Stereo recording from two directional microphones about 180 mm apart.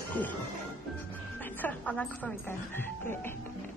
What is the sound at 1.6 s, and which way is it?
Speech, 10° left (ahead or behind).